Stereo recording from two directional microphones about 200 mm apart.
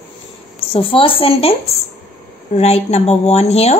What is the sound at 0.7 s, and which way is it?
A woman's voice, 25° left (ahead or behind).